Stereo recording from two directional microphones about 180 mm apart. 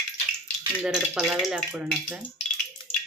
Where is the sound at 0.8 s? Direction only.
5° right (ahead or behind).